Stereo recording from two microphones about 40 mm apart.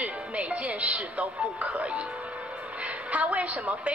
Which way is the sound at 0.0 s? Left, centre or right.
Right.